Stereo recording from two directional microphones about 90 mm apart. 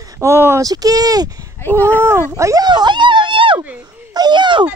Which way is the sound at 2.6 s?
55° right (ahead or behind).